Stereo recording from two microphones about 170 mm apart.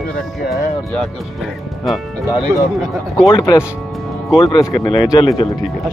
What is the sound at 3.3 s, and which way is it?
Speech, 25° left (ahead or behind).